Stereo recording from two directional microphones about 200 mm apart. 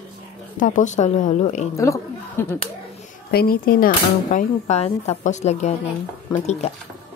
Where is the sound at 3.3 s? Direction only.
50° left (ahead or behind); by 5.7 s 35° left (ahead or behind).